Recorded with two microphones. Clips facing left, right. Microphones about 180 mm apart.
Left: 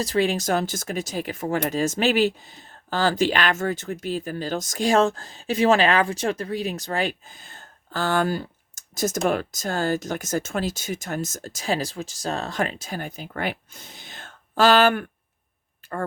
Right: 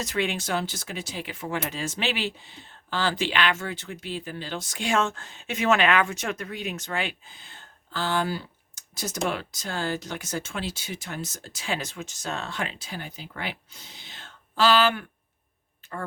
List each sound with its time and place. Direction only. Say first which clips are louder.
0.0 s speech: left 6 dB; 35° left (ahead or behind)